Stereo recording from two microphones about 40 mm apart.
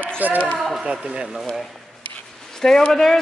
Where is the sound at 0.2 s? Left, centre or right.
Right.